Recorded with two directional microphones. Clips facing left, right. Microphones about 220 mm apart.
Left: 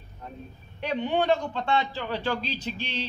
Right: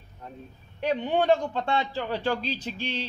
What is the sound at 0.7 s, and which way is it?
A man's voice, 45° right (ahead or behind).